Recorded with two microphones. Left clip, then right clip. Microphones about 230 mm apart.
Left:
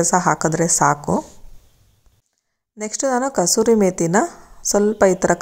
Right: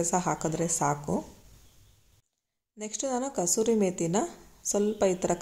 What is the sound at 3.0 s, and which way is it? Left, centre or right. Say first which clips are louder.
A woman's voice: left 12 dB; left.